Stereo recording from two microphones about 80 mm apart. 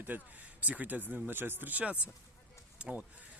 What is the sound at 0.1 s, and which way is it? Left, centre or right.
Speech, right.